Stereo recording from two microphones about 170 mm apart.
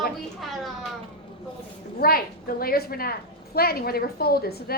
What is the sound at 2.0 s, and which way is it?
A woman's voice, 60° left (ahead or behind).